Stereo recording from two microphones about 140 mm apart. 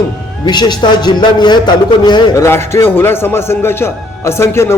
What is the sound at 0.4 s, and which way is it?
A man's voice, 30° left (ahead or behind).